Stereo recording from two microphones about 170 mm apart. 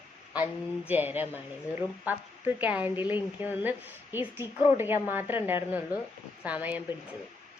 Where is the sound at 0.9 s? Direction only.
10° right (ahead or behind).